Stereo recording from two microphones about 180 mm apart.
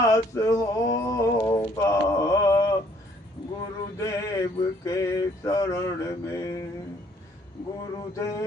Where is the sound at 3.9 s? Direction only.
20° left (ahead or behind).